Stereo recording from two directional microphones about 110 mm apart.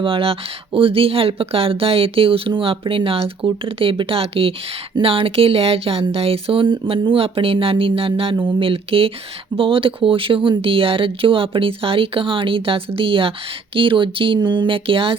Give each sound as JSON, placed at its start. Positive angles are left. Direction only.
{"t": 0.0, "sound": "speech", "side_deg": -55}